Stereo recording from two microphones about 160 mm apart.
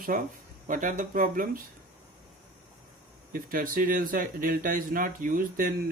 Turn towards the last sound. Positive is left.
turn(degrees=-60)  # may be behind; listen again after turning